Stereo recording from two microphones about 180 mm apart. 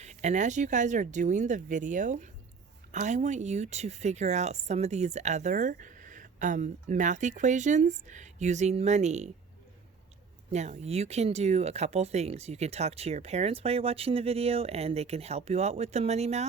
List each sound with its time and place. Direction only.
0.0 s speech: 40° right (ahead or behind)
10.5 s speech: 40° right (ahead or behind)